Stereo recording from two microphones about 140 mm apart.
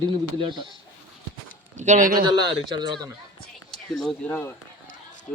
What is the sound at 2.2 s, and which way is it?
Speech, 30° right (ahead or behind).